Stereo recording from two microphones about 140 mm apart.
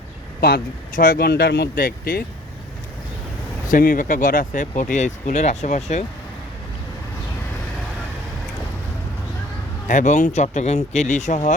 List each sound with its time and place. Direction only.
0.4 s speech: 85° left
3.7 s speech: 75° left (ahead or behind); by 6.0 s 60° left (ahead or behind)
9.8 s speech: 60° left (ahead or behind)